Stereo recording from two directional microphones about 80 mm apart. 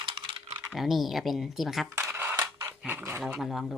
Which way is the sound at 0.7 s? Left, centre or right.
Centre.